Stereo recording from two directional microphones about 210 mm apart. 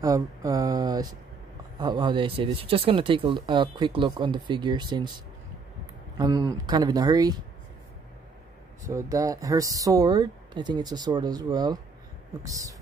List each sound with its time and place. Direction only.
0.0 s speech: 15° right (ahead or behind)
6.1 s speech: 20° right (ahead or behind)
8.8 s speech: 15° right (ahead or behind)